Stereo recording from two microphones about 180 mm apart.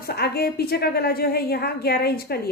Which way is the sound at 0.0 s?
60° left (ahead or behind).